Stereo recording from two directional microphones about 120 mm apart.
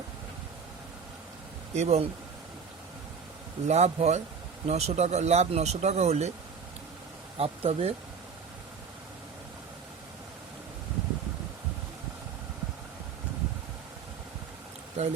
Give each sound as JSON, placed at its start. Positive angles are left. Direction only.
{"t": 1.7, "sound": "speech", "side_deg": -65}
{"t": 3.7, "sound": "speech", "side_deg": -65}
{"t": 7.3, "sound": "speech", "side_deg": -55}
{"t": 15.0, "sound": "speech", "side_deg": -65}